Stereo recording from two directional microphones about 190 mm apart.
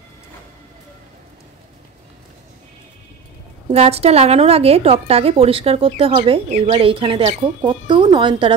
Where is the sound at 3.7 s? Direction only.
35° right (ahead or behind).